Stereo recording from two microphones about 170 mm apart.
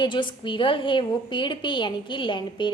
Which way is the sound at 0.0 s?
30° left (ahead or behind).